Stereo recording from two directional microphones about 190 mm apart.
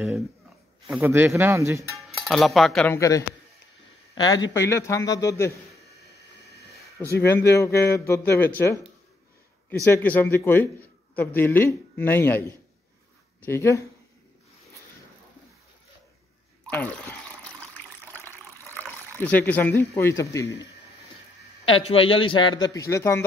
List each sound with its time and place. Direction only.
1.0 s speech: 10° right (ahead or behind)
2.2 s speech: centre (ahead or behind)
2.9 s a man's voice: 15° left (ahead or behind)
4.1 s a sound: 20° left (ahead or behind)
4.6 s a man's voice: 15° left (ahead or behind)
7.2 s a man's voice: 10° left (ahead or behind)
16.7 s water: 10° left (ahead or behind)
18.7 s speech: 10° left (ahead or behind)
21.8 s a man's voice: 30° left (ahead or behind)